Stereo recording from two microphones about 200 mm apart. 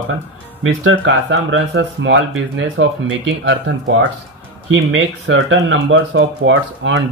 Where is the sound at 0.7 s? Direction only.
70° right (ahead or behind).